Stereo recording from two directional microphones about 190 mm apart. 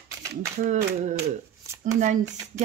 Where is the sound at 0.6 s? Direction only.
40° right (ahead or behind).